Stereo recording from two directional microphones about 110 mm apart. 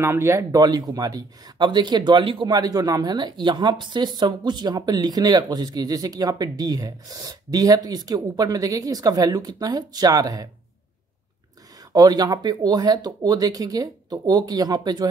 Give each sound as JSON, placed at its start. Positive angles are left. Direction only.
{"t": 0.0, "sound": "speech", "side_deg": -25}
{"t": 2.5, "sound": "speech", "side_deg": -35}
{"t": 11.9, "sound": "speech", "side_deg": -35}